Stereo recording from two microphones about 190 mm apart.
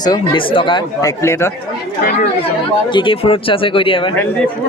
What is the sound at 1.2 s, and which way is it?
Speech, 15° left (ahead or behind).